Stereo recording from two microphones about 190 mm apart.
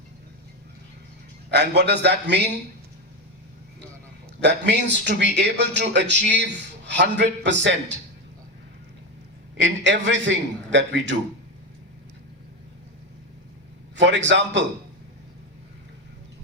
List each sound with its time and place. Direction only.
1.5 s a man's voice: 60° right (ahead or behind)
4.4 s a man's voice: 65° right (ahead or behind)
9.6 s a man's voice: 75° right (ahead or behind)
13.9 s a man's voice: 70° right (ahead or behind)